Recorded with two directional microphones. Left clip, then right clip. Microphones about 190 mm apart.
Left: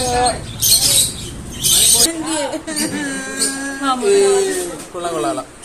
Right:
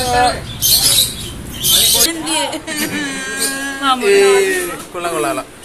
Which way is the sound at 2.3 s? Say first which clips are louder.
Right 2 dB; 40° left (ahead or behind).